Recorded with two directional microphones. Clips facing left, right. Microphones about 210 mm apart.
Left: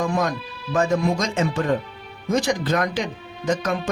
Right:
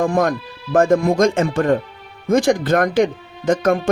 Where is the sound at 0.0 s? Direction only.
50° right (ahead or behind).